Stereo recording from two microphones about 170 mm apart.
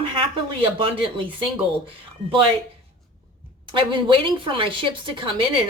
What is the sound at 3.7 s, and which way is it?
A woman's voice, 30° right (ahead or behind).